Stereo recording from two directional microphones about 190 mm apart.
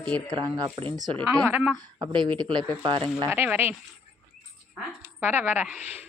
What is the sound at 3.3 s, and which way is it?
Speech, 10° right (ahead or behind).